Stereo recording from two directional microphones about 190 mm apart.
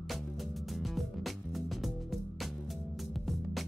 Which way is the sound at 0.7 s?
Centre (ahead or behind).